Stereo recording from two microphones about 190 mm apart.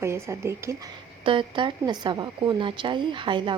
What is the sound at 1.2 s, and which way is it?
A woman's voice, 25° right (ahead or behind).